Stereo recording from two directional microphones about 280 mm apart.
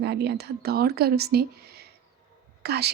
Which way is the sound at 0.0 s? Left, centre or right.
Right.